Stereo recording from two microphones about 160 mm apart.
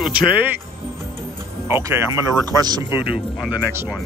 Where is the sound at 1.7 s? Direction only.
15° right (ahead or behind).